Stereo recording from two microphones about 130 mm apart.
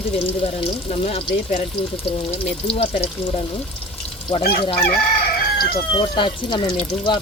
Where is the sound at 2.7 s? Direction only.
50° left (ahead or behind).